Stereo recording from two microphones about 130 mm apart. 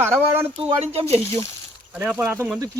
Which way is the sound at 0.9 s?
50° right (ahead or behind).